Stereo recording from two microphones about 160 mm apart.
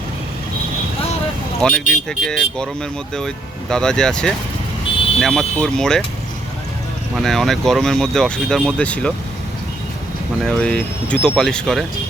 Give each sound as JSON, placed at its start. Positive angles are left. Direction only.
{"t": 1.6, "sound": "speech", "side_deg": 5}
{"t": 7.2, "sound": "speech", "side_deg": 0}
{"t": 10.4, "sound": "speech", "side_deg": 5}